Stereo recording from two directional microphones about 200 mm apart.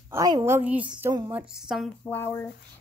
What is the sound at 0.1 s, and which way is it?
A woman's voice, 15° right (ahead or behind).